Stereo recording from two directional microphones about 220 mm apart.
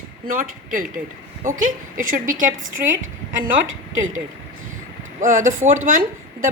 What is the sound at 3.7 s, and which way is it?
Speech, 60° right (ahead or behind).